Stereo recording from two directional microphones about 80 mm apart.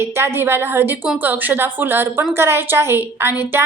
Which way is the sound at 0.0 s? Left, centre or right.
Right.